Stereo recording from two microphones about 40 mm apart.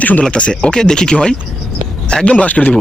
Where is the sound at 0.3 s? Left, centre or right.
Left.